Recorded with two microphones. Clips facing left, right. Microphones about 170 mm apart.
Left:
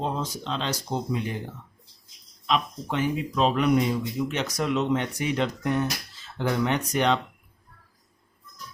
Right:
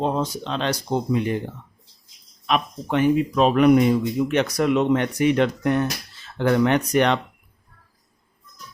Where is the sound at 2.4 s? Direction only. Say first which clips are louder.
Right 3 dB; 60° right (ahead or behind).